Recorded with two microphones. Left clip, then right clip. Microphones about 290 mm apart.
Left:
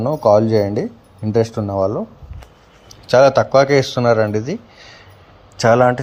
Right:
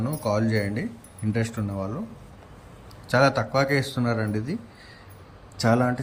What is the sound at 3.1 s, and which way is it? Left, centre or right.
Speech, left.